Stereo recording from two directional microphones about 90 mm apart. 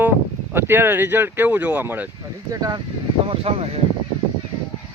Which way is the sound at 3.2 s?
90° right.